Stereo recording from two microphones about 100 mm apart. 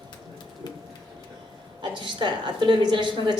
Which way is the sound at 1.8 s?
50° right (ahead or behind).